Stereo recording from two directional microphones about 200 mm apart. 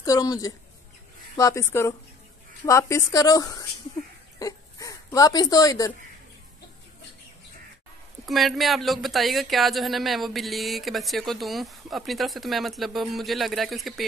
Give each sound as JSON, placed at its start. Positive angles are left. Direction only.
{"t": 0.0, "sound": "a woman's voice", "side_deg": 15}
{"t": 8.3, "sound": "speech", "side_deg": 0}